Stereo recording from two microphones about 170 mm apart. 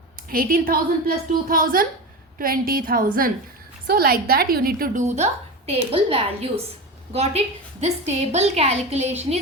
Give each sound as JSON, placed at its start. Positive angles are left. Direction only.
{"t": 0.3, "sound": "a woman's voice", "side_deg": -55}
{"t": 5.0, "sound": "a woman's voice", "side_deg": -40}